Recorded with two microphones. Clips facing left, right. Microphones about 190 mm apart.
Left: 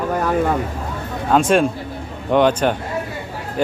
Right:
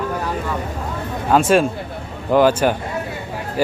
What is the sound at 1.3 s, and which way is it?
Speech, 5° right (ahead or behind).